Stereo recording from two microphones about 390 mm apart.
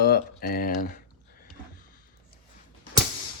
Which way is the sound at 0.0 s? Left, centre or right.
Left.